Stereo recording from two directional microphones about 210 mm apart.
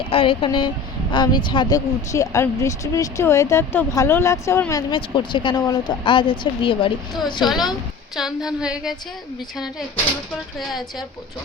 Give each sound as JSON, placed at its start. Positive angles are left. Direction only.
{"t": 0.1, "sound": "a woman's voice", "side_deg": 25}
{"t": 7.4, "sound": "a woman's voice", "side_deg": 0}
{"t": 10.6, "sound": "a woman's voice", "side_deg": 0}